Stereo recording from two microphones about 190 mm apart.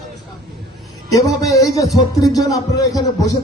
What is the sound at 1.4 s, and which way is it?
A man's voice, 15° left (ahead or behind).